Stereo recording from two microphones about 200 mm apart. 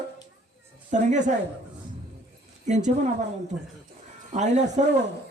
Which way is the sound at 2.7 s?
35° right (ahead or behind).